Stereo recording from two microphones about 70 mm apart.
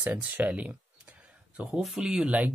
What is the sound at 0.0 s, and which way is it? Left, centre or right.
Speech, right.